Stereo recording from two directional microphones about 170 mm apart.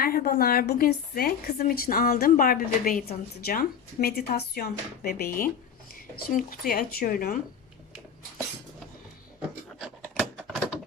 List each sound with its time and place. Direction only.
0.0 s a woman's voice: 60° left (ahead or behind)
10.3 s typewriter: 5° right (ahead or behind)